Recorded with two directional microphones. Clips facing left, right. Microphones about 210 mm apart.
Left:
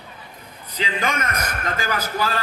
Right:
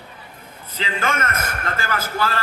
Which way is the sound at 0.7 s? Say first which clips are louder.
Even; 15° left (ahead or behind).